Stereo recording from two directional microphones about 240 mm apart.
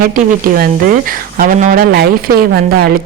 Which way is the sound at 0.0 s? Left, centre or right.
Right.